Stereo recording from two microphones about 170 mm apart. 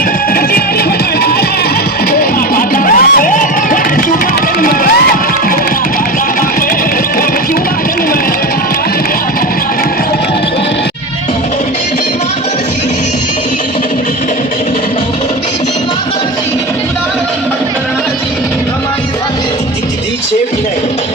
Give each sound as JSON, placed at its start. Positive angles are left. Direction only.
{"t": 2.6, "sound": "music", "side_deg": 55}